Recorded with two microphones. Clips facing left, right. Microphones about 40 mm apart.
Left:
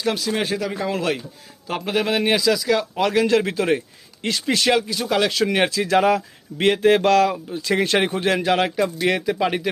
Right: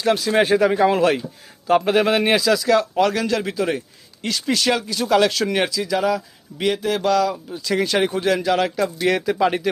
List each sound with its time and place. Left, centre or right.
0.0 s a man's voice: centre
0.3 s speech: centre
0.6 s speech: right
0.9 s a man's voice: centre
3.2 s a man's voice: left
4.9 s a man's voice: centre
5.3 s speech: centre
5.6 s speech: left
7.3 s speech: left
9.0 s speech: centre